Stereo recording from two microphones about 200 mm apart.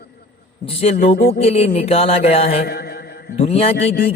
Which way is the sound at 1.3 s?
30° left (ahead or behind).